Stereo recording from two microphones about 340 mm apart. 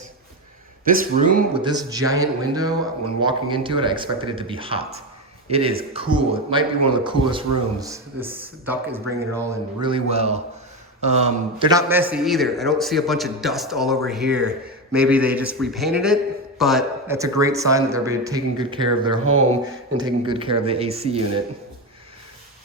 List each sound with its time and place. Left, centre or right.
0.9 s a man's voice: right
19.2 s speech: right
20.0 s a man's voice: centre